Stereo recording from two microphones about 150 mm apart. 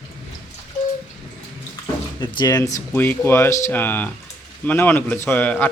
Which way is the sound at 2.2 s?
30° left (ahead or behind).